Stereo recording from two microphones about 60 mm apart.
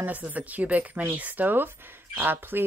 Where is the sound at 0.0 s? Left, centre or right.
Right.